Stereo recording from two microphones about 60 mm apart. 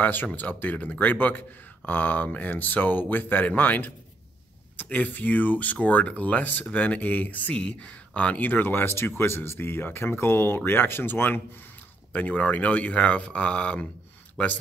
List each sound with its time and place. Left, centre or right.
0.0 s speech: left; by 14.5 s centre